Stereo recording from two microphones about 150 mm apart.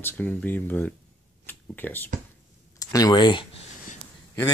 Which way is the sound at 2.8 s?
25° left (ahead or behind).